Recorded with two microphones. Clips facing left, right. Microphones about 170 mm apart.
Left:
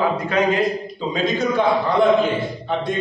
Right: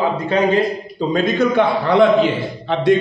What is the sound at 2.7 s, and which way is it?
Speech, 90° right.